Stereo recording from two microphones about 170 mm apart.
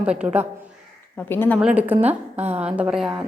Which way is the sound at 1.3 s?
10° left (ahead or behind).